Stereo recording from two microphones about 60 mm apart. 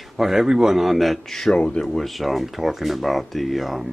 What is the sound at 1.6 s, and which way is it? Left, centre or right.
Speech, centre.